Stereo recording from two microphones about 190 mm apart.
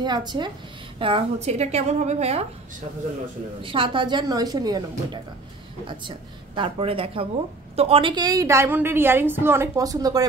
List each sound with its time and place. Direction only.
0.0 s a woman's voice: 25° right (ahead or behind)
3.6 s a woman's voice: 25° right (ahead or behind)